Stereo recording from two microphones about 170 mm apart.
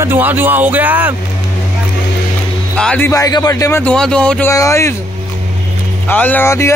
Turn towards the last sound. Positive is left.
turn(degrees=15)  # may be behind; listen again after turning